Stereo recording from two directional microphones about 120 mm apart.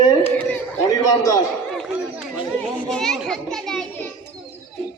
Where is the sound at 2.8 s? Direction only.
5° left (ahead or behind).